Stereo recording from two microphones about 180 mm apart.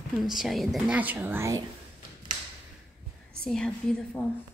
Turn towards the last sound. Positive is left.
turn(degrees=5)  # may be behind; listen again after turning